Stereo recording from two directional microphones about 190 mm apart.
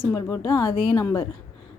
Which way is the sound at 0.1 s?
15° left (ahead or behind).